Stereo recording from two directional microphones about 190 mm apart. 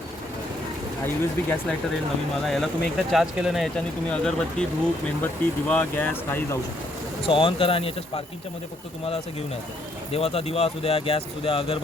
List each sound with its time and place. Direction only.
1.0 s speech: 10° left (ahead or behind)
7.3 s speech: 30° left (ahead or behind)
10.1 s speech: 30° left (ahead or behind)